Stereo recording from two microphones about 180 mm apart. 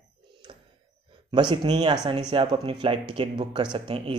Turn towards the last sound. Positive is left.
turn(degrees=-25)  # may be behind; listen again after turning